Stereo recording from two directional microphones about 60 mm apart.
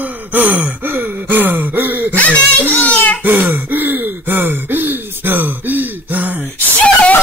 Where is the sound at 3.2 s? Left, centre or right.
Right.